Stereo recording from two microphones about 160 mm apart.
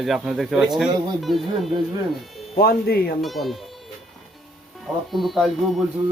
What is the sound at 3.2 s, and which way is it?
Speech, centre (ahead or behind).